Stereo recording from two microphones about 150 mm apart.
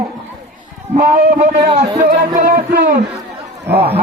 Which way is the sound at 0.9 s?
80° right.